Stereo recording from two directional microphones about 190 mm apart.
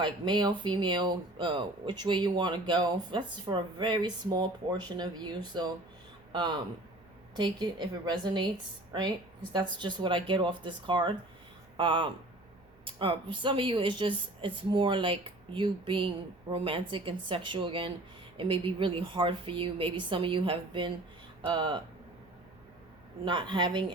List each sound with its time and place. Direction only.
0.0 s speech: 25° right (ahead or behind)
23.2 s speech: 25° right (ahead or behind)